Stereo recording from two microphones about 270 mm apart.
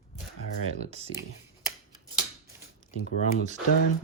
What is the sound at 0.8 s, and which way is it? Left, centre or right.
Speech, right.